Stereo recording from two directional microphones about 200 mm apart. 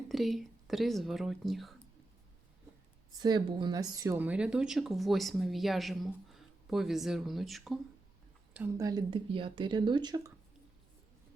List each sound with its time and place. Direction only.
0.1 s speech: centre (ahead or behind)
3.2 s speech: 20° right (ahead or behind); by 7.8 s centre (ahead or behind)
8.5 s speech: 15° right (ahead or behind)